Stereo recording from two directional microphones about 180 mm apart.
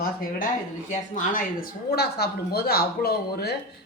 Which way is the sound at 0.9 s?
45° left (ahead or behind).